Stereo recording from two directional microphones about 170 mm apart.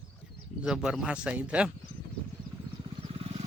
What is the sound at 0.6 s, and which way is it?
Speech, 5° right (ahead or behind).